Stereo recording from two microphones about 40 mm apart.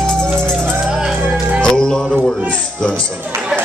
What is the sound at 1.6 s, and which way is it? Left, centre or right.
Music, centre.